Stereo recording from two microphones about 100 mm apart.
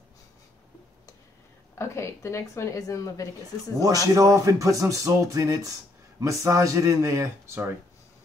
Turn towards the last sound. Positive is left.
turn(degrees=-25)  # may be behind; listen again after turning